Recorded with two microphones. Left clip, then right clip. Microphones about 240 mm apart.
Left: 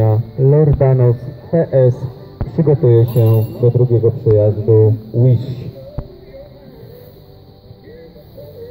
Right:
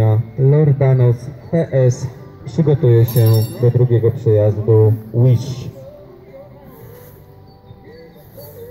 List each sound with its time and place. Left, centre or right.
0.0 s speech: right